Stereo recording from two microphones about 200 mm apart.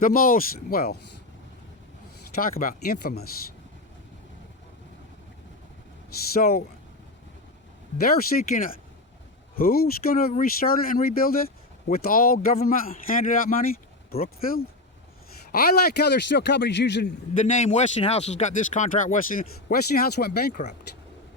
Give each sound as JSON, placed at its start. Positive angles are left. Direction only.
{"t": 0.0, "sound": "speech", "side_deg": 45}
{"t": 2.4, "sound": "speech", "side_deg": 45}
{"t": 6.3, "sound": "speech", "side_deg": 50}
{"t": 7.9, "sound": "speech", "side_deg": 50}
{"t": 17.4, "sound": "speech", "side_deg": 35}